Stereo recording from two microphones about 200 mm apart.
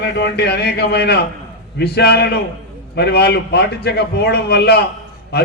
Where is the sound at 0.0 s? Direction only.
55° left (ahead or behind).